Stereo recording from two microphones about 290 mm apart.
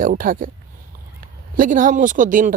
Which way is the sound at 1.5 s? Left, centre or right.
Right.